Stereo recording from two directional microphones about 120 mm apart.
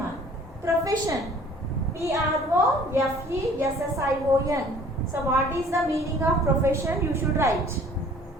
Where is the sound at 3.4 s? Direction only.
25° right (ahead or behind).